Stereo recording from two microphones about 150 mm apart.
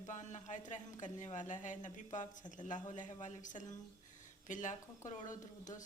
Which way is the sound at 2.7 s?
55° left (ahead or behind).